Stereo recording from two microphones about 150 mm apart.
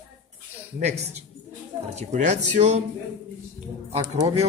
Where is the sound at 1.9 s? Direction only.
50° right (ahead or behind).